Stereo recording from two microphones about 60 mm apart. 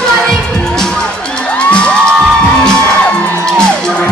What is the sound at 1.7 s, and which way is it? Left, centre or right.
Music, centre.